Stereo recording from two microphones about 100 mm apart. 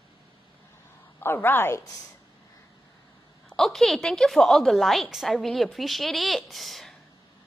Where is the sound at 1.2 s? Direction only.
20° left (ahead or behind).